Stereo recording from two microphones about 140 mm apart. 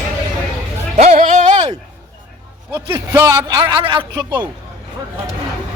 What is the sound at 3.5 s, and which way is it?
Speech, 35° right (ahead or behind).